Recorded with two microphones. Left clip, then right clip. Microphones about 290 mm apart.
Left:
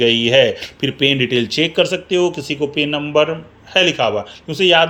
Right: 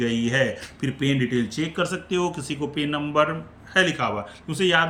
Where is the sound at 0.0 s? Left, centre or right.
Centre.